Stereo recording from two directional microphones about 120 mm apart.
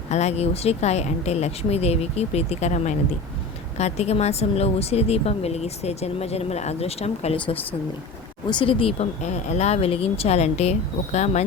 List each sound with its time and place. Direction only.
0.1 s speech: 65° left (ahead or behind)
8.4 s speech: 45° left (ahead or behind); by 11.4 s 70° left (ahead or behind)